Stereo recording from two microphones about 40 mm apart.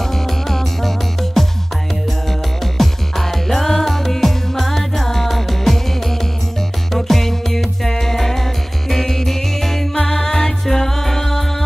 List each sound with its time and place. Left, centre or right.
0.5 s music: centre
2.6 s music: centre
7.1 s music: centre